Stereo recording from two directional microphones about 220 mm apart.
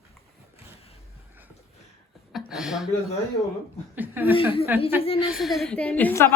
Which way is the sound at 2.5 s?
Centre (ahead or behind).